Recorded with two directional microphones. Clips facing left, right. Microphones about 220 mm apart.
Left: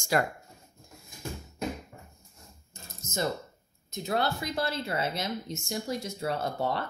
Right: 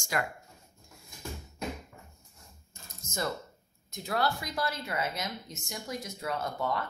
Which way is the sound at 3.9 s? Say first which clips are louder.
Left 2 dB; 20° left (ahead or behind).